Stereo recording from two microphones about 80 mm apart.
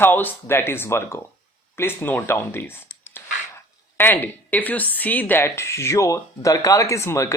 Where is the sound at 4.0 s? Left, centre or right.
Left.